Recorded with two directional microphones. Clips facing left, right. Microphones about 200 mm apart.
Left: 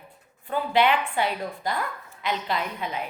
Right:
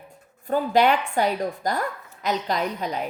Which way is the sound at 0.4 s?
40° right (ahead or behind).